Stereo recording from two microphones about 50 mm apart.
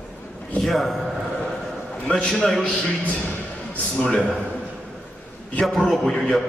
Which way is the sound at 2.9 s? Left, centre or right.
Left.